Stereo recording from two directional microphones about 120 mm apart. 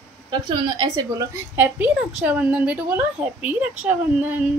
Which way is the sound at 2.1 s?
10° right (ahead or behind).